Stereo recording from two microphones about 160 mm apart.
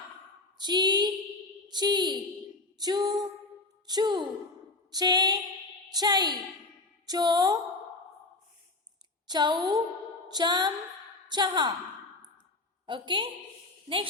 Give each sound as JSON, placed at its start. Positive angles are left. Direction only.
{"t": 0.6, "sound": "a sound", "side_deg": -25}
{"t": 1.6, "sound": "speech", "side_deg": -25}
{"t": 2.7, "sound": "female singing", "side_deg": -25}
{"t": 9.2, "sound": "female singing", "side_deg": -25}
{"t": 12.8, "sound": "a woman's voice", "side_deg": -30}